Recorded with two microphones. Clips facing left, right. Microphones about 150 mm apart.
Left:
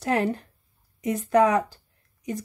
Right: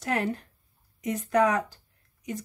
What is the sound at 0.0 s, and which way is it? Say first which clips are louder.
Speech: left 4 dB; 30° left (ahead or behind).